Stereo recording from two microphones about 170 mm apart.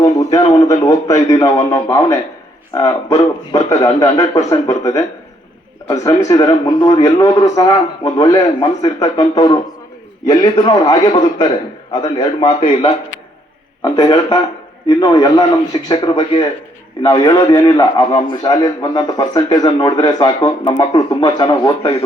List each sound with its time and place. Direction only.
0.2 s a man's voice: 20° left (ahead or behind)